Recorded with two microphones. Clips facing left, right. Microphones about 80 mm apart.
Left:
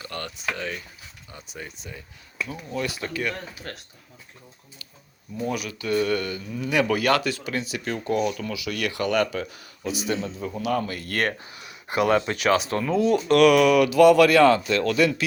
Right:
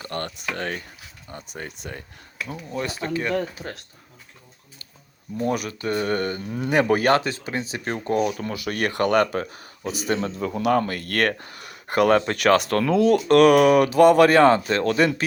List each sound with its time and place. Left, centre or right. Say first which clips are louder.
0.0 s speech: right 2 dB; right
2.7 s speech: right 2 dB; right
5.4 s speech: right 4 dB; right
13.2 s speech: right 1 dB; right